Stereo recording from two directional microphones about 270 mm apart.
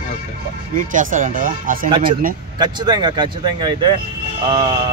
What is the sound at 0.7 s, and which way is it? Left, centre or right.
Speech, right.